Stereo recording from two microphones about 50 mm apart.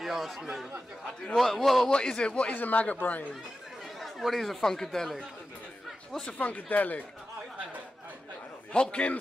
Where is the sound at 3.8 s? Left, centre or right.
Centre.